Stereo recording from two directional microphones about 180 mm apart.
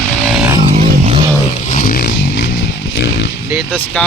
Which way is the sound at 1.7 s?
50° left (ahead or behind).